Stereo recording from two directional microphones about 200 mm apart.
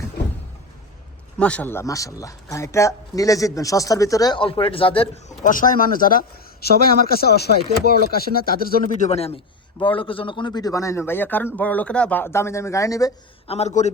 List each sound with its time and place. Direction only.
1.4 s a man's voice: 5° left (ahead or behind); by 5.2 s 25° left (ahead or behind)
5.4 s speech: 40° left (ahead or behind)
9.0 s a man's voice: 30° left (ahead or behind)
13.5 s a man's voice: 35° left (ahead or behind)